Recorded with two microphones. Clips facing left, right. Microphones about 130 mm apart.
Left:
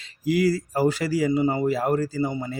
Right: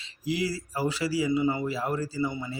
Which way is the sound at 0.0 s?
50° left (ahead or behind).